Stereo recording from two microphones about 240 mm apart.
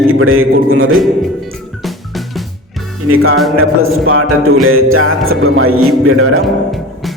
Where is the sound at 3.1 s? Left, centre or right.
Right.